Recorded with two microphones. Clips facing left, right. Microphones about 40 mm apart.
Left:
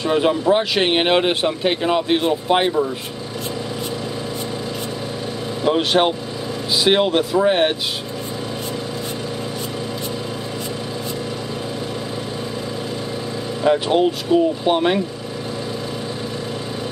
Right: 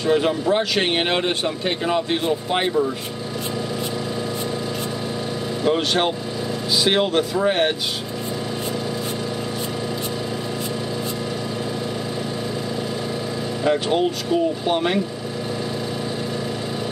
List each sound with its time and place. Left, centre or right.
0.0 s speech: centre
5.6 s speech: centre
13.7 s speech: centre